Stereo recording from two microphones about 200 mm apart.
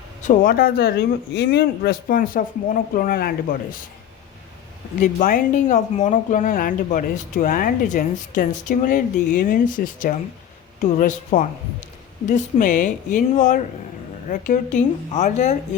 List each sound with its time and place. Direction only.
0.2 s speech: 40° left (ahead or behind)
4.9 s speech: 40° left (ahead or behind)